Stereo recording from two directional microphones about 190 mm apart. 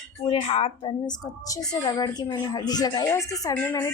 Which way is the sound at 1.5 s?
20° left (ahead or behind).